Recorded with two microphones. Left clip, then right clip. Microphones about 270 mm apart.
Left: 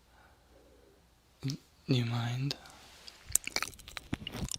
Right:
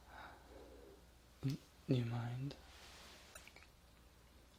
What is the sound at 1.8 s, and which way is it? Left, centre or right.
Speech, left.